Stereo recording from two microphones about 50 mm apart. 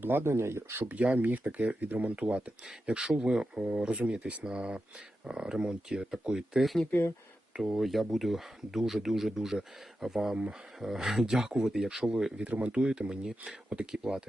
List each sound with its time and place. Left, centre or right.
0.0 s speech: right
0.9 s speech: right; by 6.6 s centre
7.5 s speech: centre
12.5 s speech: right